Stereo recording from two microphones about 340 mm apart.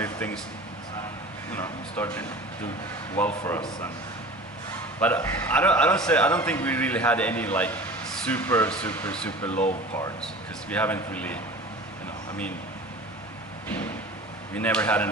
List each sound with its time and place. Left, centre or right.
0.0 s a sound: centre
1.5 s a man's voice: centre
5.0 s a man's voice: centre
14.5 s a man's voice: centre